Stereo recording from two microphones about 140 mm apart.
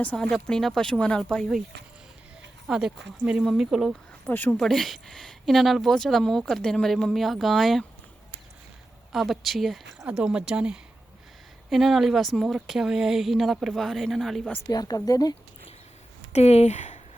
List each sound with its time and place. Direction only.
0.0 s speech: 10° left (ahead or behind)
2.6 s speech: 5° right (ahead or behind)
4.3 s speech: 15° left (ahead or behind)
4.6 s speech: centre (ahead or behind)
9.1 s speech: centre (ahead or behind)
14.7 s a woman's voice: 25° left (ahead or behind)
16.3 s speech: 50° left (ahead or behind)